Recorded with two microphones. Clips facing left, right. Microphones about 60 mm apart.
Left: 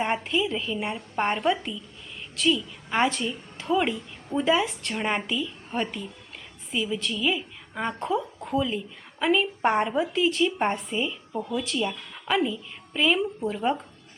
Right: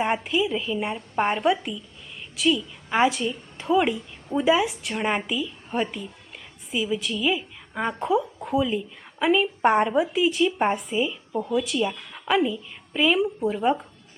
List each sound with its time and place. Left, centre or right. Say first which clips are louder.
0.0 s a woman's voice: right 2 dB; centre
11.3 s speech: right 3 dB; right
11.5 s a woman's voice: right 4 dB; centre